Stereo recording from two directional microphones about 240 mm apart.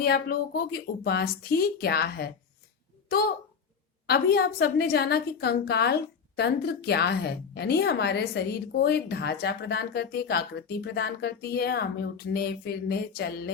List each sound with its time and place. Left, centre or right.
0.0 s a woman's voice: left